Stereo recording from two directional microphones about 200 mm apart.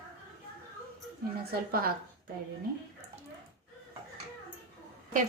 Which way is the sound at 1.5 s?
50° right (ahead or behind).